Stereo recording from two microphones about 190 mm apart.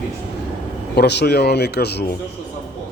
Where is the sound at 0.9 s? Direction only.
60° left (ahead or behind).